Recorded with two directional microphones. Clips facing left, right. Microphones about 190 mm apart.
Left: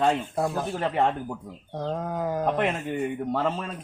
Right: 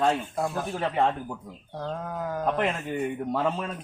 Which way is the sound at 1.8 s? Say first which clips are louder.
Left 4 dB; 25° left (ahead or behind).